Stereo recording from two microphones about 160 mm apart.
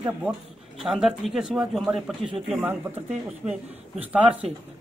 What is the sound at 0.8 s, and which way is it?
Speech, 5° right (ahead or behind).